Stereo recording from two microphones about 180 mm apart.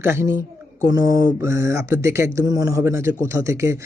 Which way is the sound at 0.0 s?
15° right (ahead or behind).